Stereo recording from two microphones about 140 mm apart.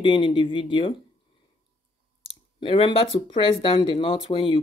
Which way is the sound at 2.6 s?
40° left (ahead or behind).